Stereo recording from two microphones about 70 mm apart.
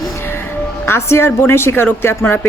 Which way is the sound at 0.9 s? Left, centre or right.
Left.